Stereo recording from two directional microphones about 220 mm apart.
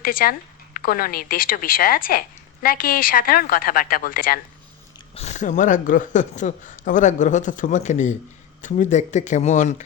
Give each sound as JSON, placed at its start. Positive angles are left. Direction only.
{"t": 0.0, "sound": "speech", "side_deg": 40}